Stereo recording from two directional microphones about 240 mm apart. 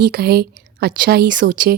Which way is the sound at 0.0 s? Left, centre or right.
Right.